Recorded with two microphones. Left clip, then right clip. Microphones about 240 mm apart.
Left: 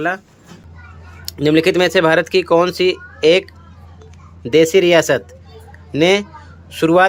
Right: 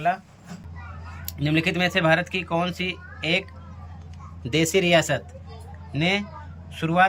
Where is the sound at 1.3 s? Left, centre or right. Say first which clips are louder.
Left 11 dB; centre.